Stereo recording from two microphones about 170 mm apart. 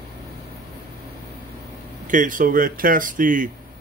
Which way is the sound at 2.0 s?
50° right (ahead or behind).